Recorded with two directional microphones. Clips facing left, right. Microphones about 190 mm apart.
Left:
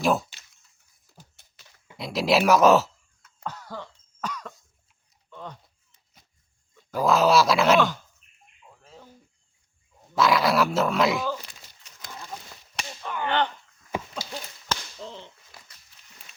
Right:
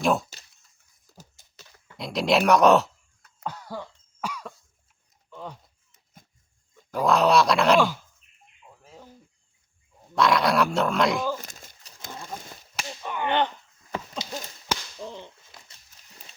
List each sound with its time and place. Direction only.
0.0 s speech: centre (ahead or behind)
1.4 s a sound: 65° left (ahead or behind)
2.0 s speech: centre (ahead or behind)
3.4 s cough: 10° right (ahead or behind)
5.3 s a sound: 10° right (ahead or behind)
6.9 s speech: centre (ahead or behind)
8.8 s bird: 10° right (ahead or behind)
10.2 s speech: centre (ahead or behind)
11.3 s horse: 45° right (ahead or behind); by 12.3 s 25° right (ahead or behind)
13.0 s whip: 15° right (ahead or behind)
14.7 s chop: 15° right (ahead or behind)